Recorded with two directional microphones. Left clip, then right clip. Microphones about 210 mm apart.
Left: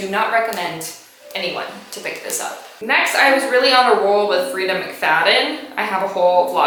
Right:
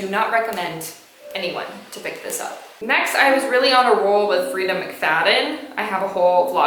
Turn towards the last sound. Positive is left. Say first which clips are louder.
# left 2 dB
turn(degrees=-30)  # may be behind; listen again after turning